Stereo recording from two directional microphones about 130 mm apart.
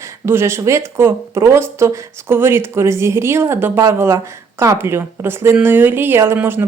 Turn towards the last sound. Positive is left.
turn(degrees=-15)  # may be behind; listen again after turning